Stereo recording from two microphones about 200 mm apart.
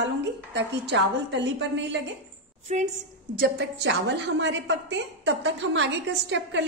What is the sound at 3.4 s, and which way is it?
A woman's voice, 55° right (ahead or behind).